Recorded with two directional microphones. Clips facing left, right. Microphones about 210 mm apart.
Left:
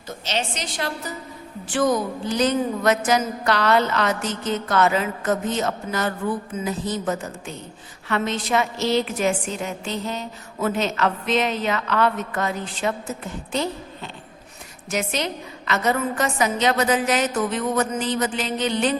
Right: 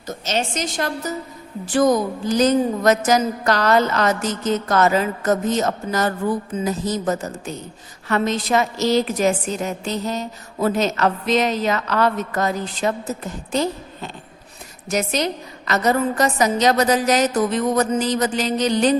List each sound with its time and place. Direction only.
0.1 s a woman's voice: 45° right (ahead or behind)